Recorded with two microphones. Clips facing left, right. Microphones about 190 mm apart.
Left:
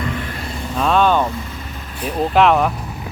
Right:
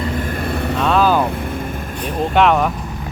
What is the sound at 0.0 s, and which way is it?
Vehicle, 40° right (ahead or behind).